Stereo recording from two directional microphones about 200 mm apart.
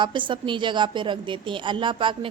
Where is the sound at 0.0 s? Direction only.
25° right (ahead or behind).